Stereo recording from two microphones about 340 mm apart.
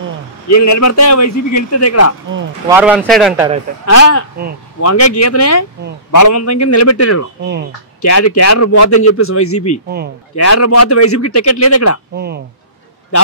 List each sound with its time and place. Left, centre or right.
0.5 s a man's voice: left
2.7 s a man's voice: centre
3.8 s a man's voice: left